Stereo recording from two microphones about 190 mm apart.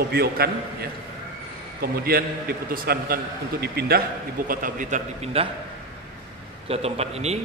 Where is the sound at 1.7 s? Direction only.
55° right (ahead or behind).